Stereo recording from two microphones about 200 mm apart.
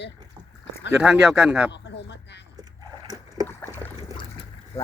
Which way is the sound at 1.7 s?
60° left (ahead or behind).